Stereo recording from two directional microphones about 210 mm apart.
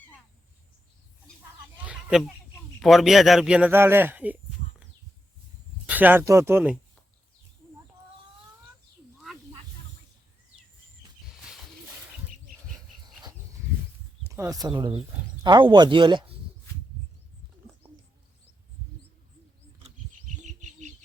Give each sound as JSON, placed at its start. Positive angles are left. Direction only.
{"t": 1.8, "sound": "chicken", "side_deg": -5}
{"t": 2.8, "sound": "speech", "side_deg": 0}
{"t": 5.9, "sound": "speech", "side_deg": -10}
{"t": 9.2, "sound": "snake", "side_deg": 0}
{"t": 14.3, "sound": "speech", "side_deg": -15}
{"t": 17.8, "sound": "bird", "side_deg": -10}
{"t": 20.4, "sound": "bird", "side_deg": -35}